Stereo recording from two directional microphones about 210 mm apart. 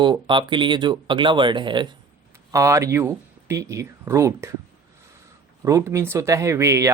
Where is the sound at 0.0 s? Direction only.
20° right (ahead or behind).